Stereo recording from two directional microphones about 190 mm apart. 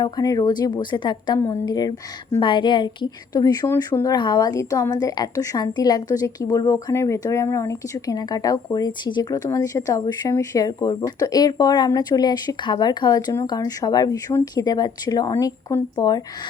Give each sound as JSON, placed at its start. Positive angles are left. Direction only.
{"t": 0.0, "sound": "a woman's voice", "side_deg": 20}